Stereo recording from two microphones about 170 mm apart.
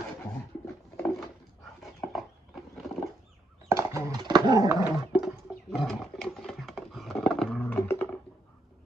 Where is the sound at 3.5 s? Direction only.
20° right (ahead or behind).